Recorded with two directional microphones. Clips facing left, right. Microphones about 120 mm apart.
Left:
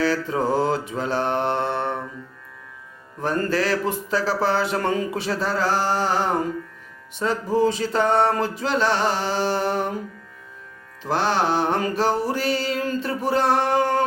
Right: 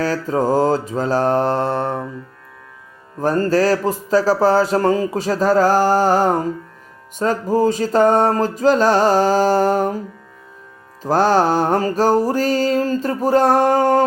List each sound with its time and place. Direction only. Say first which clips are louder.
0.0 s speech: right 3 dB; 40° right (ahead or behind)
3.2 s speech: right 6 dB; 40° right (ahead or behind)
7.2 s music: right 4 dB; 45° right (ahead or behind)
11.0 s music: right 7 dB; 40° right (ahead or behind)